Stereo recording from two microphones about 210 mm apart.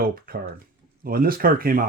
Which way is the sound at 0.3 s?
45° right (ahead or behind).